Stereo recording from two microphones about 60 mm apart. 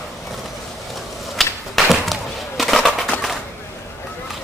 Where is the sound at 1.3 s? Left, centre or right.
Centre.